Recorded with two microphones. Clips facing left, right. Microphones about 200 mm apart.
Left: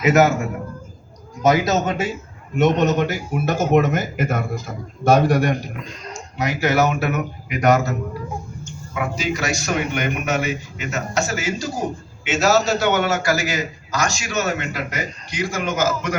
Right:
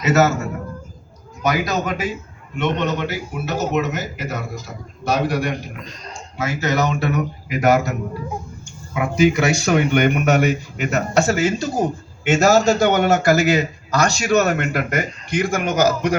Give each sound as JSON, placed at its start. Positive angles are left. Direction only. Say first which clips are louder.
{"t": 0.0, "sound": "speech", "louder": "left 1 dB", "side_deg": 15}
{"t": 1.4, "sound": "a man's voice", "louder": "left 3 dB", "side_deg": 25}
{"t": 2.6, "sound": "speech", "louder": "left 4 dB", "side_deg": 45}
{"t": 6.3, "sound": "speech", "louder": "left 2 dB", "side_deg": 15}
{"t": 9.1, "sound": "speech", "louder": "right 11 dB", "side_deg": -55}
{"t": 12.2, "sound": "a man's voice", "louder": "right 4 dB", "side_deg": -50}
{"t": 15.7, "sound": "a man's voice", "louder": "right 5 dB", "side_deg": -40}